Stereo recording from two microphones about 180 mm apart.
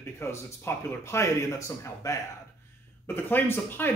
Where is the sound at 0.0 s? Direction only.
15° left (ahead or behind).